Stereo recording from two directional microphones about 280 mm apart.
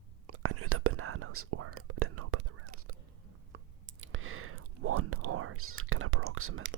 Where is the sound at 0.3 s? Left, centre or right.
Right.